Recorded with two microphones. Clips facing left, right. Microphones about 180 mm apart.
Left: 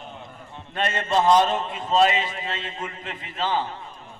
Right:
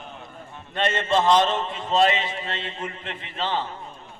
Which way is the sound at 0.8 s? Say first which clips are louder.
Right 1 dB; 40° left (ahead or behind).